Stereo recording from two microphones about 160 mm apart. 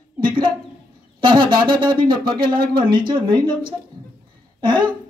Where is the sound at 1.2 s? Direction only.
30° right (ahead or behind).